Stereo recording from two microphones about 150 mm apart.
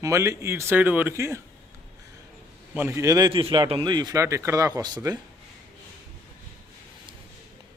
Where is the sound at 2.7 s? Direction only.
15° right (ahead or behind).